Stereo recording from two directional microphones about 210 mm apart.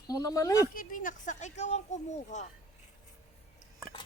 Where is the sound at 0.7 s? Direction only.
40° left (ahead or behind).